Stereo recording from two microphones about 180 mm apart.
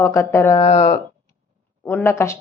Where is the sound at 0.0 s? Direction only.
15° left (ahead or behind).